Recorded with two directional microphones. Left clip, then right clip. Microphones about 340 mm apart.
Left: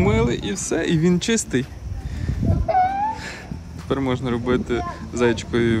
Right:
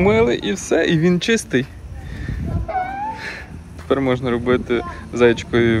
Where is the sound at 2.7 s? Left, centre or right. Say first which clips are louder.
Left 4 dB; left.